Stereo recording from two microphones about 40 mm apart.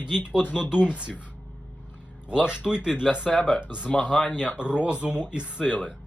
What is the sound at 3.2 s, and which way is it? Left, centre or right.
Speech, left.